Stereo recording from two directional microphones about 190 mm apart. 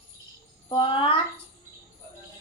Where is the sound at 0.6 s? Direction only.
25° left (ahead or behind).